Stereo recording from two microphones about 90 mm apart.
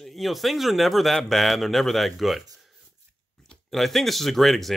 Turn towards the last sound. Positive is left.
turn(degrees=0)  # may be behind; listen again after turning